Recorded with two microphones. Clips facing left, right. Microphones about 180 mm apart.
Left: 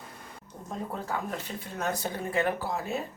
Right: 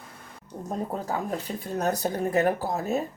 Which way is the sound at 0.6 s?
40° right (ahead or behind).